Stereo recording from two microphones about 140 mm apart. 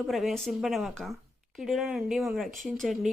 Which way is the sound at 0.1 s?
Centre (ahead or behind).